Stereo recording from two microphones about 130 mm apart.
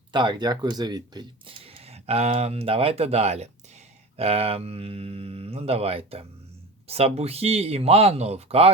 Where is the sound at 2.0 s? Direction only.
50° right (ahead or behind).